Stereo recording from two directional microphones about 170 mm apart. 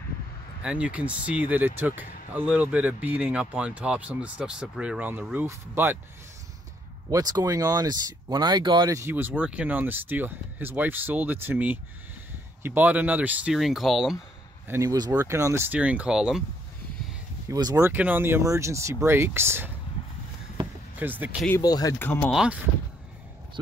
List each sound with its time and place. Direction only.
0.6 s speech: 5° right (ahead or behind)
7.1 s speech: 20° right (ahead or behind); by 14.1 s centre (ahead or behind)
14.7 s speech: 20° right (ahead or behind); by 16.4 s 5° right (ahead or behind)
17.5 s speech: 20° right (ahead or behind)
21.0 s speech: 10° right (ahead or behind)
21.5 s speech: 20° left (ahead or behind)
22.3 s speech: 5° right (ahead or behind)